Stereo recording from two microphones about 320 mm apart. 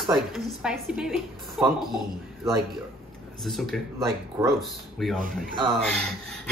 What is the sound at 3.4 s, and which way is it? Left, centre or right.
Speech, centre.